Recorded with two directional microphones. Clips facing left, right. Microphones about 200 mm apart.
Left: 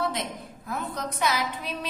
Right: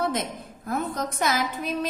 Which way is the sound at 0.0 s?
45° right (ahead or behind).